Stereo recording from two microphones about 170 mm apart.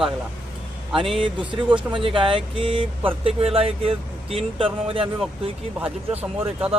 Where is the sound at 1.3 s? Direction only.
30° right (ahead or behind).